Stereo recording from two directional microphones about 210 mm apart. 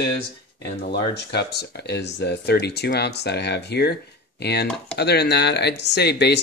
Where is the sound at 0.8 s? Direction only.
50° left (ahead or behind).